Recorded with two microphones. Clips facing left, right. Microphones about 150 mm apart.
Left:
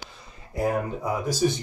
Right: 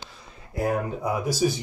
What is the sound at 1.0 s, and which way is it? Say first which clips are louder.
Speech: even; 10° right (ahead or behind).